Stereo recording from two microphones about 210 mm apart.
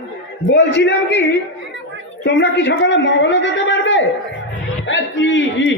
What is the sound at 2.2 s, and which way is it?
A man's voice, 55° left (ahead or behind).